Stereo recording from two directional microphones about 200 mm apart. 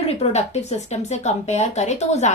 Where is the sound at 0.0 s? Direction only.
30° left (ahead or behind).